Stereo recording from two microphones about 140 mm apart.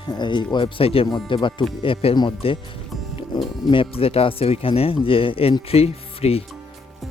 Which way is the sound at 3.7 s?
40° left (ahead or behind).